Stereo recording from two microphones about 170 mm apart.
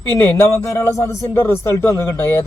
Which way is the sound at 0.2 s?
20° left (ahead or behind).